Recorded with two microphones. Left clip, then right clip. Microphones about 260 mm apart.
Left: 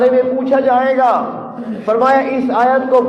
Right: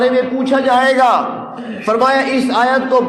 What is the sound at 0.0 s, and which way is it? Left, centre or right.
A man's voice, right.